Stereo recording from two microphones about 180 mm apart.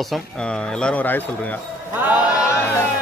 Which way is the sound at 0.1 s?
5° left (ahead or behind).